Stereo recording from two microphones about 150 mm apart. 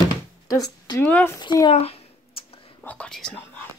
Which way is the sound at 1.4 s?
25° left (ahead or behind).